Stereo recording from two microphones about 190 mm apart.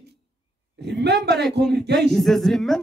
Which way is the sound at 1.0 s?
60° right (ahead or behind).